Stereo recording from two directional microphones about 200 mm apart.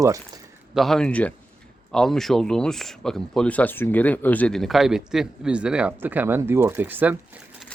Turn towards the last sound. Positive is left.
turn(degrees=-10)  # may be behind; listen again after turning